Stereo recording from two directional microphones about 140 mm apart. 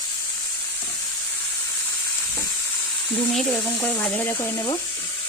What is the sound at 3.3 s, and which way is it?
Speech, 5° left (ahead or behind).